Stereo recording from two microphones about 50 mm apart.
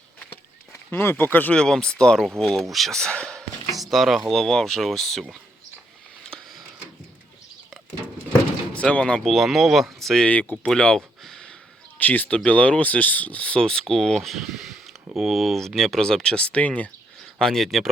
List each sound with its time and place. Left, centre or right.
0.9 s speech: left
1.5 s speech: centre
2.4 s speech: centre
3.0 s speech: centre
3.7 s speech: centre
8.7 s speech: left
9.2 s speech: centre
10.2 s speech: left
10.7 s a sound: centre
11.9 s speech: left
13.6 s speech: centre
17.4 s speech: centre